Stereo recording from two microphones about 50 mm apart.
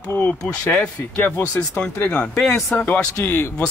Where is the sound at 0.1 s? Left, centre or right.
Left.